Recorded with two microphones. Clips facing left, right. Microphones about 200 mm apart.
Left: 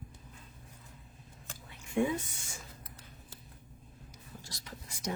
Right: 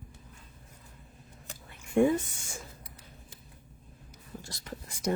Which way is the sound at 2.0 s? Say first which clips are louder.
Right 7 dB; 55° right (ahead or behind).